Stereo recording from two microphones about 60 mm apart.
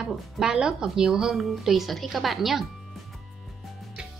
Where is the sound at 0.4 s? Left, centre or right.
Centre.